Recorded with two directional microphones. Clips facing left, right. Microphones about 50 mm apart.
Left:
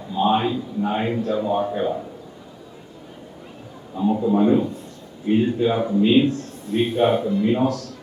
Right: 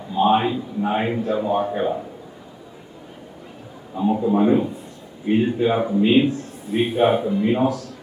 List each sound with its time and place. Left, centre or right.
0.1 s a man's voice: right
3.9 s a man's voice: right